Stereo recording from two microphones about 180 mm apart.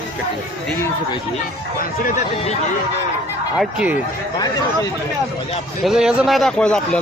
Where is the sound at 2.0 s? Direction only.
40° left (ahead or behind).